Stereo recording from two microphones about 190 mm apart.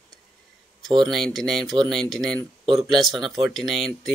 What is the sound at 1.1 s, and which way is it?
Speech, centre (ahead or behind).